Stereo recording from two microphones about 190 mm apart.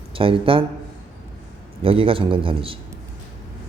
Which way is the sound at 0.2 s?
30° right (ahead or behind).